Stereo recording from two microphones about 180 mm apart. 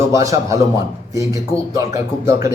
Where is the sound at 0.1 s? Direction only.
20° right (ahead or behind).